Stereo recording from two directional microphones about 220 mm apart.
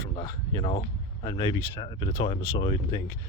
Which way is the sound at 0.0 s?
15° left (ahead or behind).